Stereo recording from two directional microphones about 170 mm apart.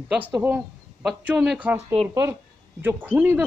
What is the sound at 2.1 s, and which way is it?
Speech, 20° right (ahead or behind).